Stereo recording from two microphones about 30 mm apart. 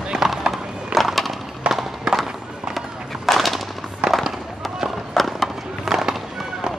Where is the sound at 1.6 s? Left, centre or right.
Right.